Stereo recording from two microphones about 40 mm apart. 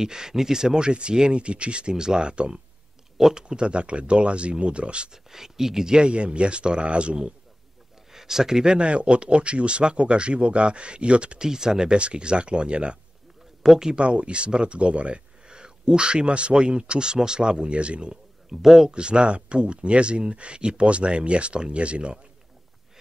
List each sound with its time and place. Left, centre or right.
0.0 s speech: centre
5.1 s speech: centre; by 7.2 s right
8.1 s speech: centre
8.7 s speech: right
11.4 s speech: centre
13.6 s speech: centre
13.9 s speech: right
18.5 s speech: centre
18.9 s speech: right